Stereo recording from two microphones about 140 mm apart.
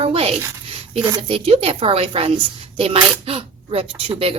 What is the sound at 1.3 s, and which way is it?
A woman's voice, 45° right (ahead or behind).